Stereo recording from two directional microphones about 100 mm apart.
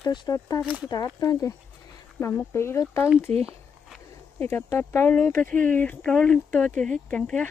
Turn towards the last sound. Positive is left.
turn(degrees=10)  # may be behind; listen again after turning